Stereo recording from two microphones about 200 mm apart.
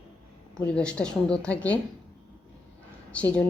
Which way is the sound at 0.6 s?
5° left (ahead or behind).